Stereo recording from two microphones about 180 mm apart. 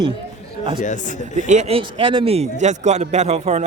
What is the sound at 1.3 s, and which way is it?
A man's voice, 40° right (ahead or behind).